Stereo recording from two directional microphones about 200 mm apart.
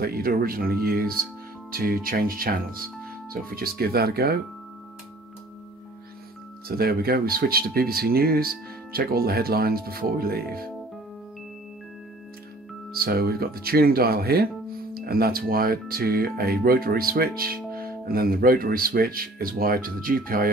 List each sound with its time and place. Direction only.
0.0 s speech: 50° right (ahead or behind)
6.7 s speech: 50° right (ahead or behind)
12.9 s speech: 50° right (ahead or behind)